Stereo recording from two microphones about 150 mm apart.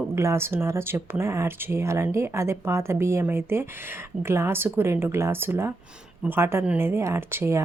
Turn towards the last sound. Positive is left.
turn(degrees=-15)  # may be behind; listen again after turning